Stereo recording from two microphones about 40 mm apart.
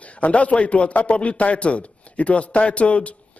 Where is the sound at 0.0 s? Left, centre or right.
Left.